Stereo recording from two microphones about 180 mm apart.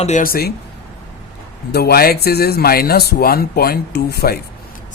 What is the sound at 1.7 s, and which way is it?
Speech, 60° left (ahead or behind).